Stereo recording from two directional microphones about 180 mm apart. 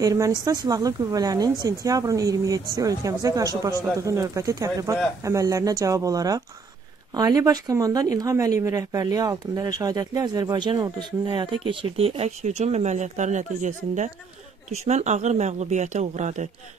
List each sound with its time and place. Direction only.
0.0 s speech: 20° right (ahead or behind); by 16.4 s 40° right (ahead or behind)